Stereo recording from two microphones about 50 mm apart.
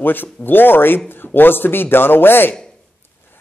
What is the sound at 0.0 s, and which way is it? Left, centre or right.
Speech, left.